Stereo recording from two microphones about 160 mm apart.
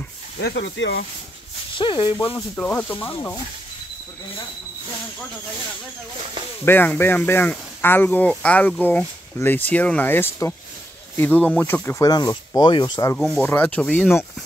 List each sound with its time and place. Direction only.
0.4 s speech: 90° left
1.8 s speech: 30° left (ahead or behind)
2.1 s speech: 15° left (ahead or behind)
6.6 s speech: 10° left (ahead or behind); by 13.0 s 30° left (ahead or behind)
13.0 s speech: 10° left (ahead or behind)